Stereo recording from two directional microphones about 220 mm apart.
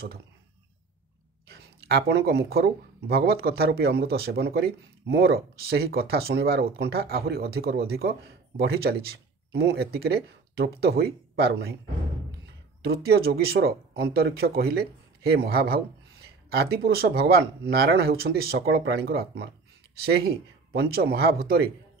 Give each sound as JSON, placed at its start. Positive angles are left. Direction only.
{"t": 1.5, "sound": "speech", "side_deg": -45}
{"t": 12.8, "sound": "speech", "side_deg": -45}
{"t": 20.7, "sound": "speech", "side_deg": -45}